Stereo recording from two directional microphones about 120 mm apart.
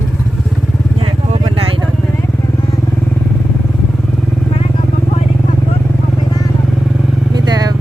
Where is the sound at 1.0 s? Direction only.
50° right (ahead or behind).